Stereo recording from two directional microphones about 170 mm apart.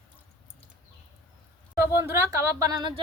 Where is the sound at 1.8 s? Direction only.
15° right (ahead or behind).